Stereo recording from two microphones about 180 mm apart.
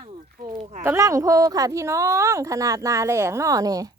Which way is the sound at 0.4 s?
25° right (ahead or behind).